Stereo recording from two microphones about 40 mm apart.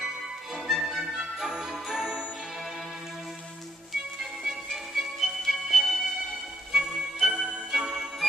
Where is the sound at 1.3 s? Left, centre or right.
Centre.